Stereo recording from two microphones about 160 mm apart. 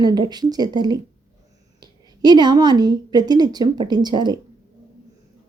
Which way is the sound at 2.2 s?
25° right (ahead or behind).